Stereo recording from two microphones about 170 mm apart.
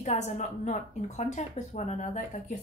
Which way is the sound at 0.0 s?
45° left (ahead or behind).